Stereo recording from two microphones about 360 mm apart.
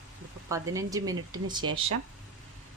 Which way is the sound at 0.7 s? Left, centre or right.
Centre.